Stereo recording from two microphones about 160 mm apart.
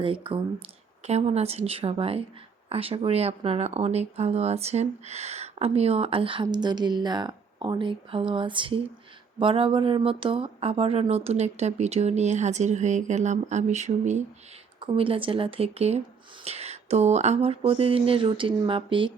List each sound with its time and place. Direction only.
0.0 s speech: 35° right (ahead or behind)
14.8 s speech: 30° right (ahead or behind)